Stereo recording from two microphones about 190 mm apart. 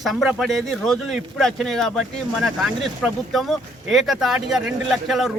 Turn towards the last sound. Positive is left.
turn(degrees=0)  # may be behind; listen again after turning